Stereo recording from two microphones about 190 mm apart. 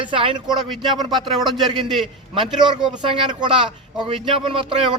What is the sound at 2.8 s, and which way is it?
A man's voice, 25° right (ahead or behind).